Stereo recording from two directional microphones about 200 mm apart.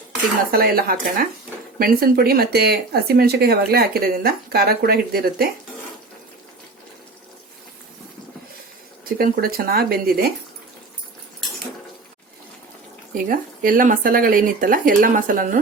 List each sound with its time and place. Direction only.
0.5 s speech: 50° right (ahead or behind)
9.1 s speech: 50° right (ahead or behind)
13.2 s speech: 45° right (ahead or behind)